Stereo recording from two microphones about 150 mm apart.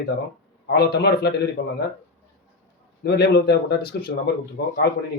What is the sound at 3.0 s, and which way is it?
A man's voice, 90° left.